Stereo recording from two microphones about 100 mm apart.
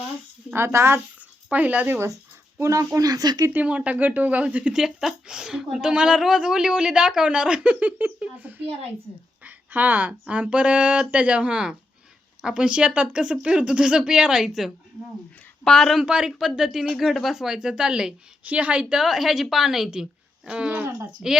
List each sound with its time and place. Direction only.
0.5 s speech: 25° right (ahead or behind)
1.5 s speech: 15° right (ahead or behind)
2.6 s speech: 30° right (ahead or behind)
3.5 s speech: 15° right (ahead or behind); by 16.0 s 5° left (ahead or behind)
16.0 s speech: 10° right (ahead or behind)